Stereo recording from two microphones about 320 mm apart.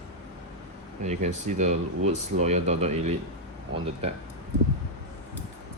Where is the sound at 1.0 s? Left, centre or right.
Right.